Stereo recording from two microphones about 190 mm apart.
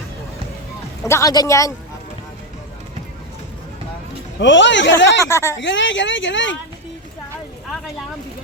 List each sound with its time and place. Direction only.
1.0 s speech: 15° left (ahead or behind)
4.4 s a woman's voice: 75° left (ahead or behind)
5.2 s speech: 15° left (ahead or behind)
5.5 s a woman's voice: 75° left (ahead or behind)